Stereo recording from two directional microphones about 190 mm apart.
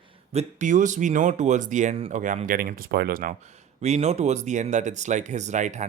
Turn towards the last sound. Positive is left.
turn(degrees=-40)  # may be behind; listen again after turning